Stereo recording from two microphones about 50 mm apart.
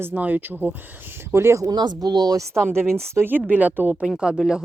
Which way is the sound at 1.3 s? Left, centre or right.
Right.